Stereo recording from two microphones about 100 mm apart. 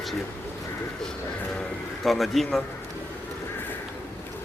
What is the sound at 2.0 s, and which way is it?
Speech, centre (ahead or behind).